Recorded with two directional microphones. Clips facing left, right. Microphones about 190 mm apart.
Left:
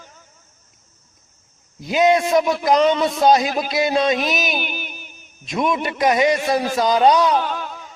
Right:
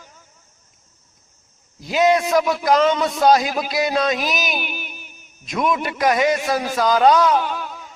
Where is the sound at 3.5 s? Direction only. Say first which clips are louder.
Left 1 dB; centre (ahead or behind).